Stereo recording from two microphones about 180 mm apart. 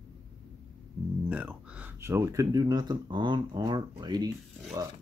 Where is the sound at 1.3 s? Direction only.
5° right (ahead or behind); by 4.3 s 20° right (ahead or behind).